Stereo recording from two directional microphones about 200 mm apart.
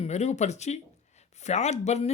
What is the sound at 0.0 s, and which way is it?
Speech, 35° left (ahead or behind).